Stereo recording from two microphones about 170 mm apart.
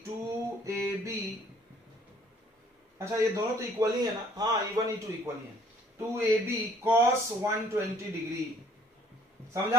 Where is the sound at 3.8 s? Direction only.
20° right (ahead or behind).